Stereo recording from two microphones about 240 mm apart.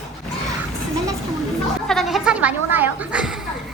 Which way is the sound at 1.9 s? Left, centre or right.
Centre.